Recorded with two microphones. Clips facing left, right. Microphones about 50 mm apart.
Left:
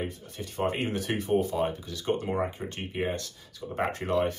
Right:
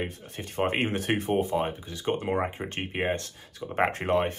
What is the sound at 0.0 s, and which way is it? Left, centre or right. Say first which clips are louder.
Speech: right 1 dB; right.